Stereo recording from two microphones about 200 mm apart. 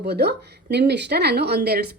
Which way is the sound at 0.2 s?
55° right (ahead or behind).